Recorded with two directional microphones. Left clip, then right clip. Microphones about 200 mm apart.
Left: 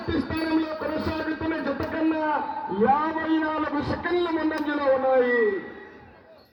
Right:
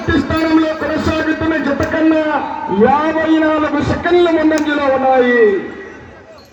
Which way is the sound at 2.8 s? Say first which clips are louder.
Right 10 dB; 50° right (ahead or behind).